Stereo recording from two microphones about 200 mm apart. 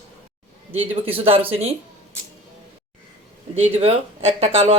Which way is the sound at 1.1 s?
30° right (ahead or behind).